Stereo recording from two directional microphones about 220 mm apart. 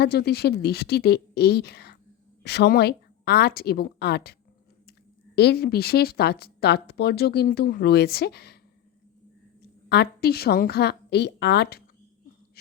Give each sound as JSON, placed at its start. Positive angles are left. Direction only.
{"t": 0.0, "sound": "speech", "side_deg": 45}
{"t": 9.9, "sound": "speech", "side_deg": 45}